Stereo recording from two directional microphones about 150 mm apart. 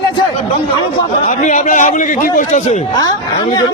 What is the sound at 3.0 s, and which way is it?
Speech, 25° left (ahead or behind).